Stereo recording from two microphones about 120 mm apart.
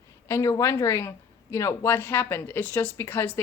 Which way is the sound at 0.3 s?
25° left (ahead or behind).